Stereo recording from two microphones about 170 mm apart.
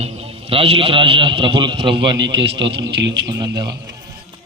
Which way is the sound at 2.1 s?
90° right.